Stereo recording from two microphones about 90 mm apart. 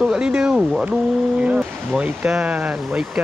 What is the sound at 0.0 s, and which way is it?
Speech, 10° right (ahead or behind).